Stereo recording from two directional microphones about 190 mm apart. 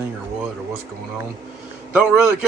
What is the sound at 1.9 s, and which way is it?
Speech, 5° right (ahead or behind).